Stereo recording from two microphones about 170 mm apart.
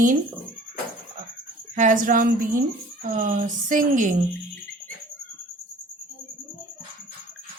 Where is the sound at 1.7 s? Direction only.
50° right (ahead or behind).